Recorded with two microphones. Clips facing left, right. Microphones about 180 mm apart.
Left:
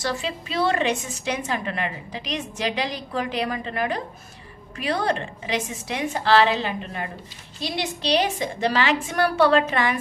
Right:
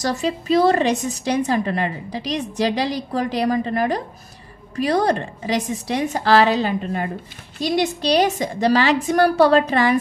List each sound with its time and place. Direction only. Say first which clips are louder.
0.0 s a woman's voice: right 5 dB; 40° right (ahead or behind)